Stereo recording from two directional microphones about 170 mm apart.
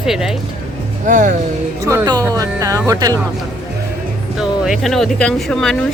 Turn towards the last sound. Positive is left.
turn(degrees=5)  # may be behind; listen again after turning